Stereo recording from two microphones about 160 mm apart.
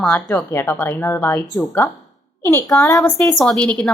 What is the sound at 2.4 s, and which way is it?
Speech, 15° left (ahead or behind).